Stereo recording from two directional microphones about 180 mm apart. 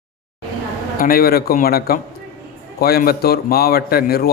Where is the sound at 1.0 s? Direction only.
55° left (ahead or behind).